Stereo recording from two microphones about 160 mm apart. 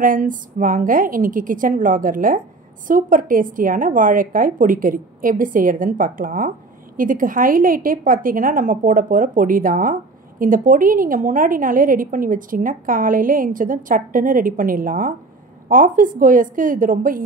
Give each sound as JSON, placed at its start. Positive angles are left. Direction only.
{"t": 0.0, "sound": "a woman's voice", "side_deg": -55}